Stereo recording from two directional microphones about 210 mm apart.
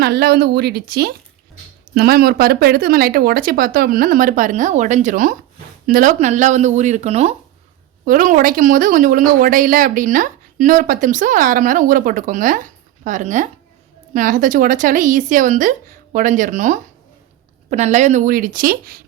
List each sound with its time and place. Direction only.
0.0 s speech: 50° right (ahead or behind)